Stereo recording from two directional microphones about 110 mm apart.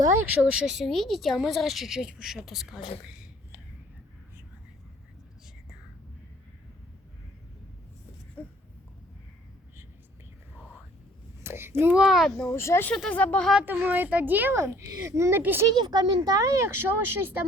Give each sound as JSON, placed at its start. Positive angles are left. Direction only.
{"t": 0.0, "sound": "a woman's voice", "side_deg": -25}
{"t": 0.5, "sound": "a woman's voice", "side_deg": -5}
{"t": 11.4, "sound": "a sound", "side_deg": -20}
{"t": 11.9, "sound": "a woman's voice", "side_deg": -5}
{"t": 12.5, "sound": "speech", "side_deg": 25}
{"t": 12.9, "sound": "speech", "side_deg": 10}
{"t": 13.8, "sound": "a woman's voice", "side_deg": -15}
{"t": 15.8, "sound": "a woman's voice", "side_deg": -40}